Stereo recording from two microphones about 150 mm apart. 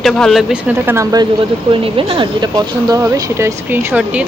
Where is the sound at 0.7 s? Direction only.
15° right (ahead or behind).